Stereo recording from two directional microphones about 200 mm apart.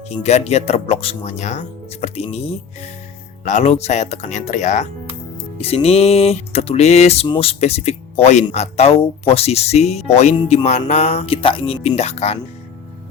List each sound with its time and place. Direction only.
0.1 s music: 35° left (ahead or behind)
3.4 s music: 35° left (ahead or behind)